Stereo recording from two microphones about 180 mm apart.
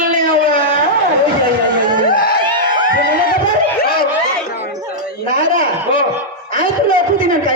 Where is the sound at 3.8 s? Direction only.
55° left (ahead or behind).